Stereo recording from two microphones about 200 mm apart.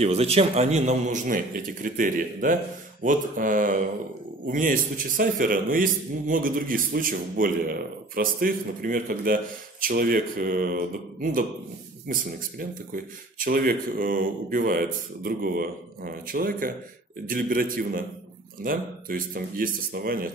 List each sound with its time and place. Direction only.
0.0 s a man's voice: 30° right (ahead or behind); by 20.2 s 50° right (ahead or behind)